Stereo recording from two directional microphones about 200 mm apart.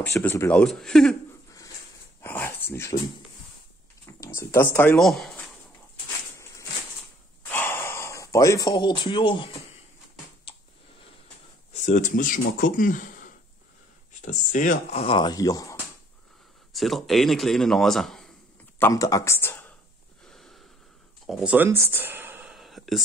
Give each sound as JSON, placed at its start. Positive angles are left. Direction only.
{"t": 0.0, "sound": "a man's voice", "side_deg": 10}
{"t": 2.2, "sound": "dog", "side_deg": 10}
{"t": 4.0, "sound": "a sound", "side_deg": 15}
{"t": 4.7, "sound": "a man's voice", "side_deg": 5}
{"t": 7.4, "sound": "gasp", "side_deg": 10}
{"t": 11.7, "sound": "speech", "side_deg": 35}
{"t": 16.7, "sound": "a man's voice", "side_deg": 0}
{"t": 18.8, "sound": "speech", "side_deg": 15}
{"t": 20.2, "sound": "wheeze", "side_deg": 0}
{"t": 21.3, "sound": "speech", "side_deg": -5}